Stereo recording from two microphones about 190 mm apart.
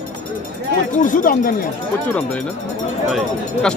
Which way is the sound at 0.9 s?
45° left (ahead or behind).